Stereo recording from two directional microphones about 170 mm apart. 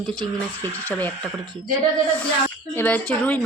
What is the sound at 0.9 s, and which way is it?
Speech, 10° left (ahead or behind).